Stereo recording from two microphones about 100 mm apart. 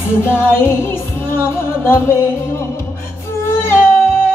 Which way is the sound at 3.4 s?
25° left (ahead or behind).